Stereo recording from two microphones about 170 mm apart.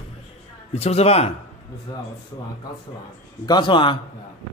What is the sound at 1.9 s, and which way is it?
Speech, 25° left (ahead or behind).